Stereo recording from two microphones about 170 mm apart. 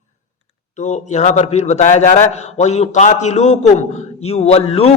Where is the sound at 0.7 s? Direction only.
45° left (ahead or behind).